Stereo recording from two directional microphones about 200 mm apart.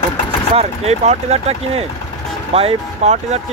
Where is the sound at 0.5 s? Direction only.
30° right (ahead or behind).